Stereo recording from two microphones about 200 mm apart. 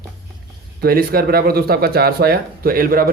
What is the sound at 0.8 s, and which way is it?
Speech, 50° right (ahead or behind).